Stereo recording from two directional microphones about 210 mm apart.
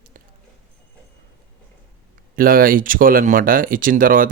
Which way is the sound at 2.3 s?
45° right (ahead or behind).